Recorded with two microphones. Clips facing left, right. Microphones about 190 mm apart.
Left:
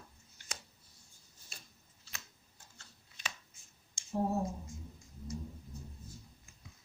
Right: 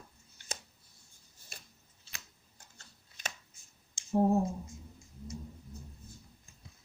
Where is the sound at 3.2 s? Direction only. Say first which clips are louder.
Right 2 dB; 45° right (ahead or behind).